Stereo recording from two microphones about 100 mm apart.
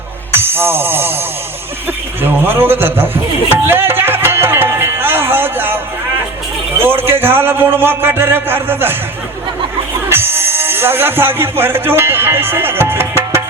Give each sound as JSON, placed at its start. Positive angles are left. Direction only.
{"t": 0.3, "sound": "music", "side_deg": -20}
{"t": 2.2, "sound": "a man's voice", "side_deg": -20}
{"t": 3.7, "sound": "music", "side_deg": -20}
{"t": 6.7, "sound": "a man's voice", "side_deg": -20}
{"t": 10.1, "sound": "speech", "side_deg": -20}